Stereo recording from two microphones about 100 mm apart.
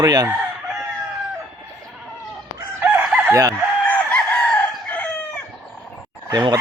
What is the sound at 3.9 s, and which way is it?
Chicken, 15° left (ahead or behind).